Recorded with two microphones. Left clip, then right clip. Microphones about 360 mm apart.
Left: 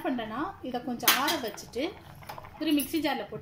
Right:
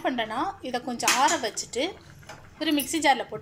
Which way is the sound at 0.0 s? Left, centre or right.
Right.